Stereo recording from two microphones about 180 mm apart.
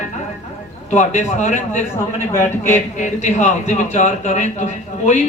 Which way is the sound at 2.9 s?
45° left (ahead or behind).